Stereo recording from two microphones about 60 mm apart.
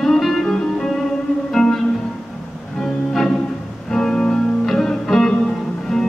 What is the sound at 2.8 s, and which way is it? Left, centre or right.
Music, centre.